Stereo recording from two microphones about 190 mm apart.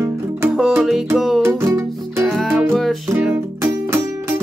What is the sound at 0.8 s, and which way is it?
Music, centre (ahead or behind).